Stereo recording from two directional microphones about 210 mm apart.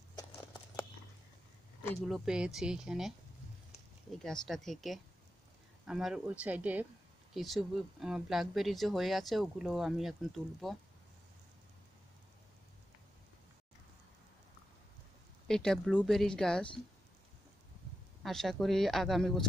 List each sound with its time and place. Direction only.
0.2 s horse: 20° left (ahead or behind)
2.0 s speech: centre (ahead or behind)
4.2 s speech: centre (ahead or behind)
15.4 s speech: 5° left (ahead or behind)
18.2 s speech: centre (ahead or behind)